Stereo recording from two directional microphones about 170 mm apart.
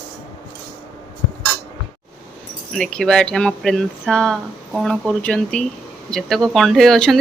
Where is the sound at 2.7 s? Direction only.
5° left (ahead or behind).